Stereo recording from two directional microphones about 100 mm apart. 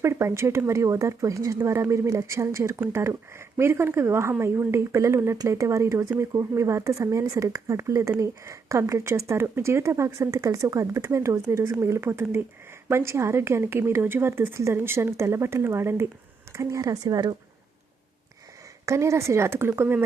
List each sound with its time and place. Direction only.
0.0 s speech: 25° right (ahead or behind)
18.9 s speech: 30° right (ahead or behind)